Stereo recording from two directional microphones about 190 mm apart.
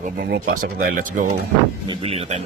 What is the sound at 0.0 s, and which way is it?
Speech, 45° right (ahead or behind).